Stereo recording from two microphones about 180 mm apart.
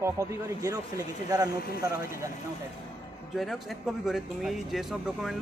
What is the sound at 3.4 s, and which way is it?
Speech, centre (ahead or behind).